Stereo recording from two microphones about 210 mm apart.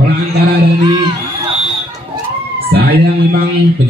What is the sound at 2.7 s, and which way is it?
Speech, 50° right (ahead or behind).